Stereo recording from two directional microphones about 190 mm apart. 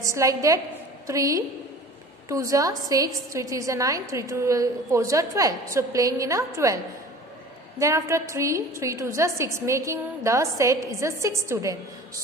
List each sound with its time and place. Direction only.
0.0 s a woman's voice: 15° right (ahead or behind)
7.8 s a woman's voice: 15° right (ahead or behind)